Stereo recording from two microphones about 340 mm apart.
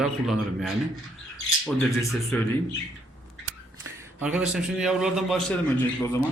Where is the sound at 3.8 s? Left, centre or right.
Centre.